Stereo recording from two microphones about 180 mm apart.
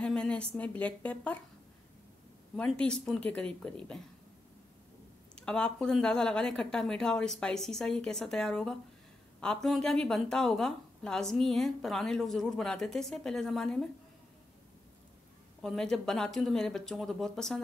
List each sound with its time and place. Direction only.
0.0 s a woman's voice: 5° left (ahead or behind)
2.5 s a woman's voice: 5° left (ahead or behind)
5.3 s a woman's voice: 5° left (ahead or behind)
15.6 s a woman's voice: 5° left (ahead or behind)